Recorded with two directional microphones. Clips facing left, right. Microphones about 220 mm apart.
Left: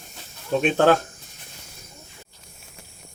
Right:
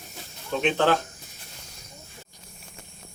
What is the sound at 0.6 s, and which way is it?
Speech, 45° left (ahead or behind).